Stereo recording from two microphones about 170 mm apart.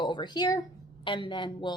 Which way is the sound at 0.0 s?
25° left (ahead or behind).